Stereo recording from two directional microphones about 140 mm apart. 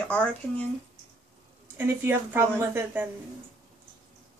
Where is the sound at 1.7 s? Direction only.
15° right (ahead or behind).